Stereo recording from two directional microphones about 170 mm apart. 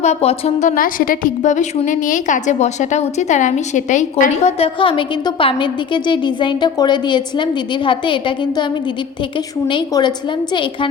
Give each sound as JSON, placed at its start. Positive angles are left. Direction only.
{"t": 0.0, "sound": "a woman's voice", "side_deg": 40}
{"t": 0.8, "sound": "a woman's voice", "side_deg": 55}
{"t": 9.6, "sound": "a woman's voice", "side_deg": 25}